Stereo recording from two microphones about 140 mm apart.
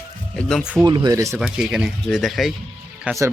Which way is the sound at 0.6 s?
5° right (ahead or behind).